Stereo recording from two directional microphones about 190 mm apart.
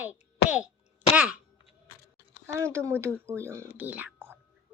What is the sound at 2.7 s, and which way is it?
Speech, 15° right (ahead or behind).